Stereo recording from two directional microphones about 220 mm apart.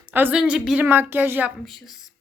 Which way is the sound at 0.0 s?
10° right (ahead or behind).